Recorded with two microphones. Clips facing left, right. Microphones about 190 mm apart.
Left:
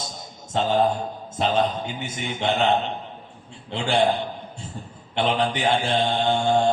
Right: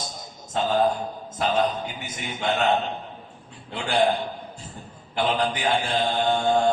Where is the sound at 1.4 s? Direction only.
25° left (ahead or behind).